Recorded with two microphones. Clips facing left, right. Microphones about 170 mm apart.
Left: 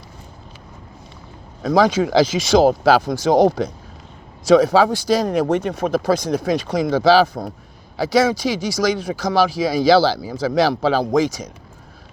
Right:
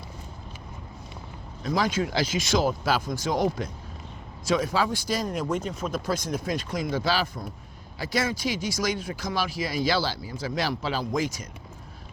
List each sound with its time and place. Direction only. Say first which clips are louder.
1.6 s speech: left 10 dB; 90° left
7.9 s speech: left 11 dB; 90° left